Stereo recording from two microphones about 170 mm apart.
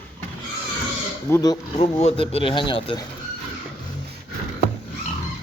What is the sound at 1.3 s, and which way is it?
Speech, 20° left (ahead or behind).